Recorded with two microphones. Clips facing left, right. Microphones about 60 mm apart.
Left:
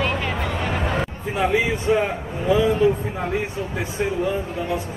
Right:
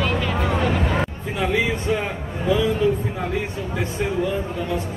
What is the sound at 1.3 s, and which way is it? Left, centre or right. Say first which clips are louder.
A man's voice: left 2 dB; centre.